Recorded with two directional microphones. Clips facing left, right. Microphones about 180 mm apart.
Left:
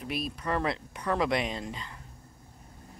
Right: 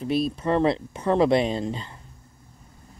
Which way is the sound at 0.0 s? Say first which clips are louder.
Right 10 dB; 30° right (ahead or behind).